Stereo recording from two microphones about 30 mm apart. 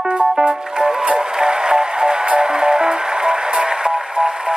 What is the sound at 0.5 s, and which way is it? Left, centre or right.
Music, right.